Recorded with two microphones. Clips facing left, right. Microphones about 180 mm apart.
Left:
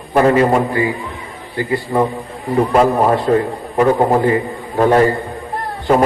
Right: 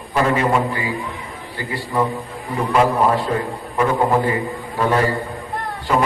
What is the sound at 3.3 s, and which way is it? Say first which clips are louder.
A man's voice: left 7 dB; 45° left (ahead or behind).